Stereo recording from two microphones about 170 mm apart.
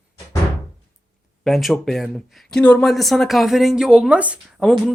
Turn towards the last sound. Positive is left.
turn(degrees=0)  # may be behind; listen again after turning